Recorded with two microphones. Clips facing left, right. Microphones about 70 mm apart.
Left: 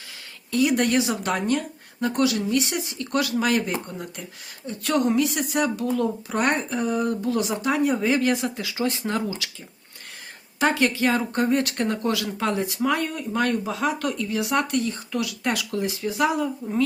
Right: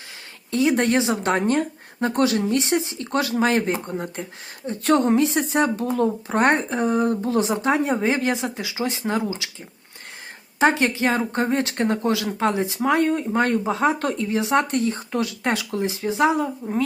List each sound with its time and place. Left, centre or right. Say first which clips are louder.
0.5 s a woman's voice: right 1 dB; right
10.6 s speech: right 2 dB; right